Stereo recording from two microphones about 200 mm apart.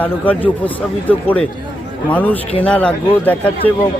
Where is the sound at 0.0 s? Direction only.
10° left (ahead or behind).